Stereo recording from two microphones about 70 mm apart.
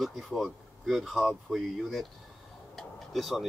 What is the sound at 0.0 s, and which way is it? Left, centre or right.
Speech, centre.